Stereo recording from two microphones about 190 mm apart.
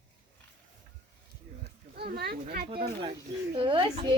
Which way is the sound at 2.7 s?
25° right (ahead or behind).